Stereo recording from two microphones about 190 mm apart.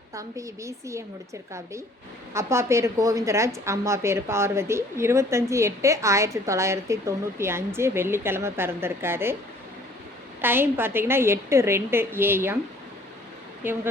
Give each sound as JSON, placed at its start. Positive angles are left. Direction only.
{"t": 0.1, "sound": "a woman's voice", "side_deg": -15}
{"t": 2.3, "sound": "a woman's voice", "side_deg": -15}
{"t": 10.4, "sound": "a woman's voice", "side_deg": -10}
{"t": 13.6, "sound": "a woman's voice", "side_deg": -10}